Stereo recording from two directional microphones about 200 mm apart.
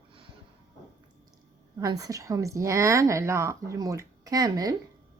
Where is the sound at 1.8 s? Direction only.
15° right (ahead or behind).